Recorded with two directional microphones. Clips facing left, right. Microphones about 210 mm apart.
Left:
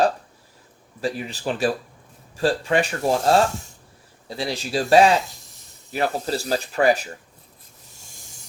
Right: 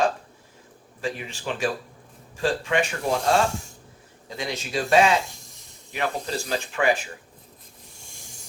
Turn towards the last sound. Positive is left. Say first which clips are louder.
# left 4 dB
turn(degrees=40)  # may be behind; listen again after turning